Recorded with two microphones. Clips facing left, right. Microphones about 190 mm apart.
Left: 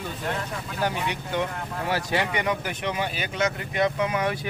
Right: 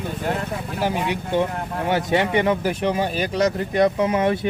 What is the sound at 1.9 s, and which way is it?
Speech, 25° right (ahead or behind).